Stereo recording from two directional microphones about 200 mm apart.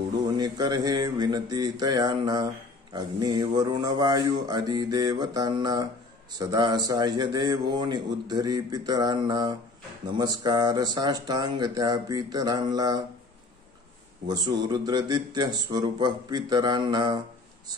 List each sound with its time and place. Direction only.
0.4 s a man's voice: 20° right (ahead or behind)
14.2 s a man's voice: 20° right (ahead or behind)